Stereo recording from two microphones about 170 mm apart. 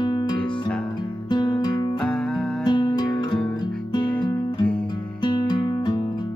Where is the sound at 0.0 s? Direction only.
25° left (ahead or behind).